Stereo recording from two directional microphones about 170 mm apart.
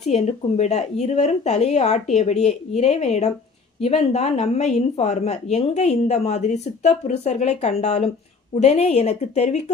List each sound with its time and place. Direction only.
0.0 s speech: 40° left (ahead or behind)